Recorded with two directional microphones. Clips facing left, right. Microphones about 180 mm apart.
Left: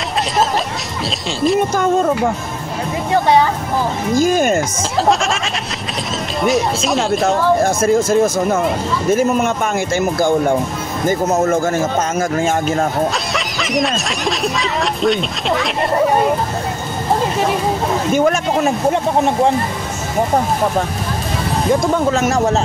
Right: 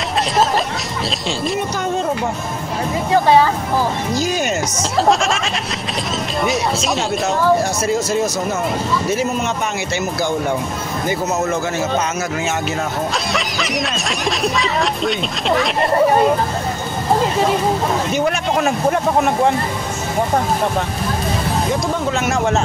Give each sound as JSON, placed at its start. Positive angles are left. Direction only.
{"t": 4.1, "sound": "a man's voice", "side_deg": 50}
{"t": 5.0, "sound": "speech", "side_deg": 0}
{"t": 7.2, "sound": "a man's voice", "side_deg": 50}
{"t": 13.3, "sound": "speech", "side_deg": 0}
{"t": 18.6, "sound": "speech", "side_deg": 30}
{"t": 22.1, "sound": "a man's voice", "side_deg": 40}